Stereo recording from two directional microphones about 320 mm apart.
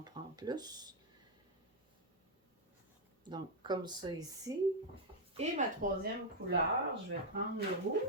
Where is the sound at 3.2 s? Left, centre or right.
Centre.